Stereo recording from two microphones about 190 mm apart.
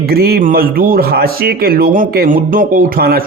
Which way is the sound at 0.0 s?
55° right (ahead or behind).